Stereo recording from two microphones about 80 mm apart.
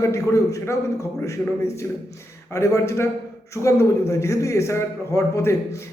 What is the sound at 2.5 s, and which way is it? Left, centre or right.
A man's voice, left.